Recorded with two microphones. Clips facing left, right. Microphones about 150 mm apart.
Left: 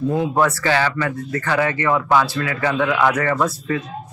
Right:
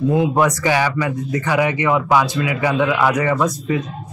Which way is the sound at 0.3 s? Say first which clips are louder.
Right 1 dB; 15° right (ahead or behind).